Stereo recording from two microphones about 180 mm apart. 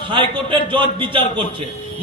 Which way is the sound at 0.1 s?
30° right (ahead or behind).